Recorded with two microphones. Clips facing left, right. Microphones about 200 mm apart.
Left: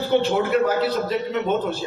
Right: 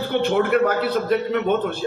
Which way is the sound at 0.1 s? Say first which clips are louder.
Even; 55° right (ahead or behind).